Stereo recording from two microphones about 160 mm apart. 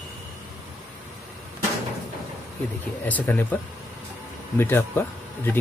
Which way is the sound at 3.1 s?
10° left (ahead or behind).